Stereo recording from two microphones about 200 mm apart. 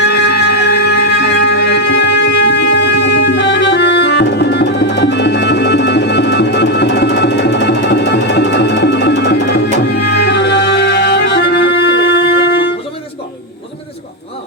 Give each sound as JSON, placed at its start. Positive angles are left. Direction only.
{"t": 0.0, "sound": "music", "side_deg": 60}